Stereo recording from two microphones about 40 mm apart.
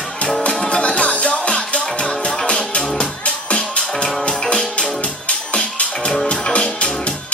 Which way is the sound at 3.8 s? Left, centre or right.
Centre.